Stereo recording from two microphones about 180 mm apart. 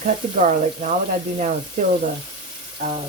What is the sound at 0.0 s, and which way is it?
Speech, 45° right (ahead or behind).